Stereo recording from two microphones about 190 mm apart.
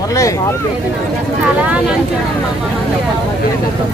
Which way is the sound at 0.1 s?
15° left (ahead or behind).